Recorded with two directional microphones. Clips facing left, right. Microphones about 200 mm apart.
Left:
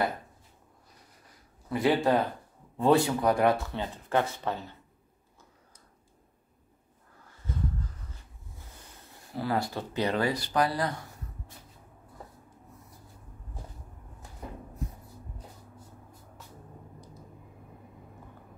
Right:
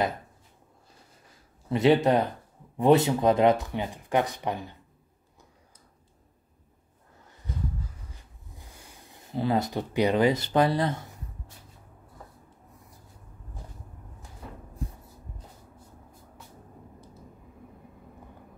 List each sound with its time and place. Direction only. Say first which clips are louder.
1.7 s speech: right 4 dB; 20° right (ahead or behind)
9.3 s speech: right 4 dB; 20° right (ahead or behind)
14.8 s a sound: right 2 dB; 30° right (ahead or behind)